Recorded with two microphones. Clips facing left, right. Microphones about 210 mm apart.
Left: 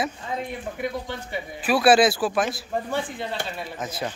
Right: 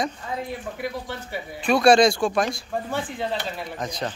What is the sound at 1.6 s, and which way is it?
Speech, 5° left (ahead or behind).